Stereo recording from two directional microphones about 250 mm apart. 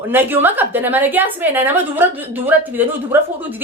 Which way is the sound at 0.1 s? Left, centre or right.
Centre.